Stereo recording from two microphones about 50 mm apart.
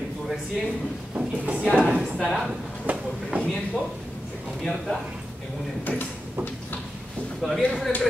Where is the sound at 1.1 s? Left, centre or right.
Right.